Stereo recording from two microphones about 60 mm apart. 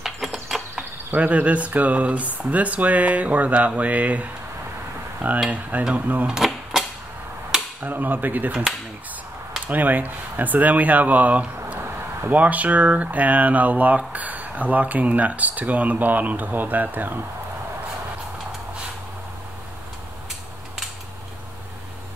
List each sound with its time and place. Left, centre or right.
0.0 s a sound: centre
1.1 s speech: right
5.5 s speech: right
6.3 s cash register: centre
7.8 s speech: right
9.7 s speech: right